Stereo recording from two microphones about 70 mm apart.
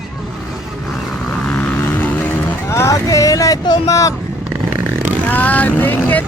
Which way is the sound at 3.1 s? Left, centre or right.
Left.